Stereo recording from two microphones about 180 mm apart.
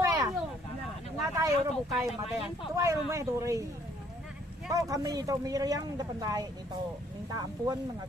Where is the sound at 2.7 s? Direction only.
15° right (ahead or behind).